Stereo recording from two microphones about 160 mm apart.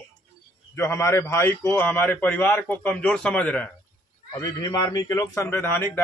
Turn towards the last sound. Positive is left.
turn(degrees=15)  # may be behind; listen again after turning